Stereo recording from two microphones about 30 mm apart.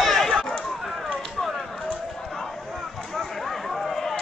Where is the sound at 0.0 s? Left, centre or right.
Centre.